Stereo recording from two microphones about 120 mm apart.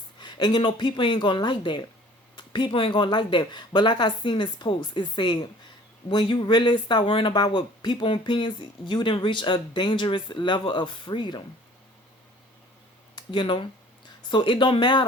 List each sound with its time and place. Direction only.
0.2 s speech: 40° left (ahead or behind)
13.1 s speech: 40° left (ahead or behind)